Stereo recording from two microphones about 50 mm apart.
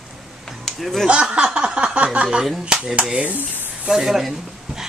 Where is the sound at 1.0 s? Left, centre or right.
Centre.